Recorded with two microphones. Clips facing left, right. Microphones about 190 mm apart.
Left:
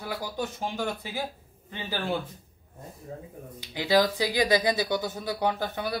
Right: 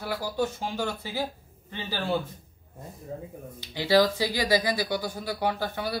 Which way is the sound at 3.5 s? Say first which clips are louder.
Right 2 dB; 15° left (ahead or behind).